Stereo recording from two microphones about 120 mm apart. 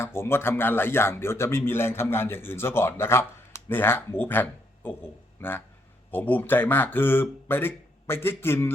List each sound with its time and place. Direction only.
0.0 s speech: 20° left (ahead or behind)